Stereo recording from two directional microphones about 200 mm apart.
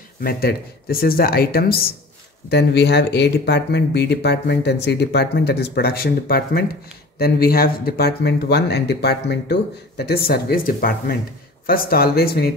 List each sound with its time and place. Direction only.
0.2 s speech: 50° left (ahead or behind)